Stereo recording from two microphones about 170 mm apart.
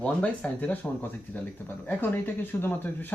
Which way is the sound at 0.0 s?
10° left (ahead or behind).